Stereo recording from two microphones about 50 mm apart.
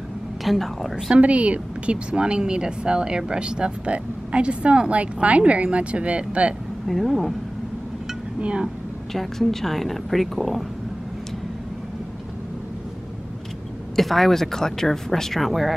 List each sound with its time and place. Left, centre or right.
0.4 s speech: centre
1.1 s speech: right
6.9 s speech: centre
8.4 s speech: right
9.1 s speech: centre
13.9 s speech: centre